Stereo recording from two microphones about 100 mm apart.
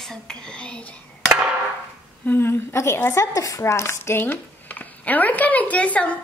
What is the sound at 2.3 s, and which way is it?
A child's voice, 25° left (ahead or behind).